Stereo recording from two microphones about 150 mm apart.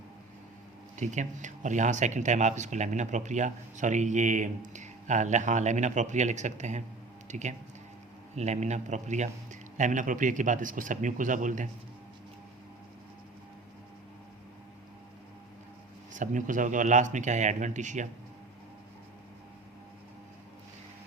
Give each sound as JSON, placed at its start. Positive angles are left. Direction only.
{"t": 0.9, "sound": "a man's voice", "side_deg": -55}
{"t": 16.1, "sound": "a man's voice", "side_deg": -60}